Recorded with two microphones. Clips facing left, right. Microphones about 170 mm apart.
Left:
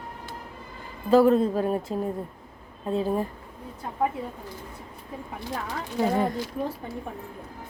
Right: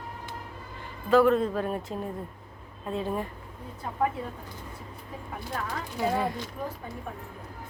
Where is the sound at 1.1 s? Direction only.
35° left (ahead or behind).